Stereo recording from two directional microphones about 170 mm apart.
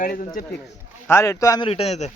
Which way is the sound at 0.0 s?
50° left (ahead or behind).